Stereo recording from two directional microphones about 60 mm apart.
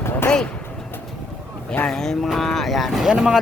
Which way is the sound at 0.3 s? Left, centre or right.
Centre.